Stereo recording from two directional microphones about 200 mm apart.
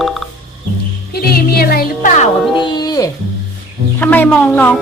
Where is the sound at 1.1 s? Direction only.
50° left (ahead or behind).